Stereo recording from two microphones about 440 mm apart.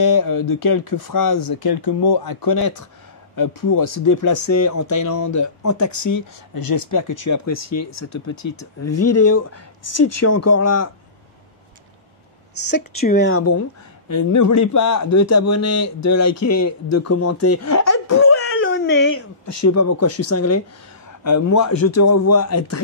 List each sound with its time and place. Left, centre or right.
0.0 s speech: left
12.5 s speech: left
19.4 s speech: left